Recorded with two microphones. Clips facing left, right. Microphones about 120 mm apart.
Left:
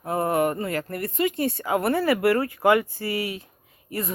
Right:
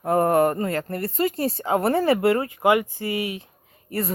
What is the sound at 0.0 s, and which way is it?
Speech, 45° right (ahead or behind).